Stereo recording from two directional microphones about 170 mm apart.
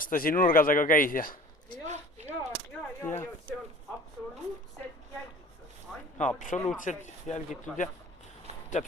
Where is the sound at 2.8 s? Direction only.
10° left (ahead or behind).